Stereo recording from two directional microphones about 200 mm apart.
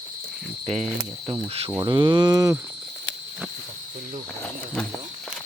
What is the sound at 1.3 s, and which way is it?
Cricket, 30° right (ahead or behind).